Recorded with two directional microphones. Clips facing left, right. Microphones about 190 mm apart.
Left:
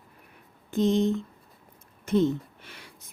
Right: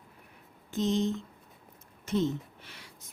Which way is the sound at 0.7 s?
55° left (ahead or behind).